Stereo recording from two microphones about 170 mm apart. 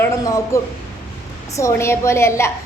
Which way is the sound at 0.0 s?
20° left (ahead or behind).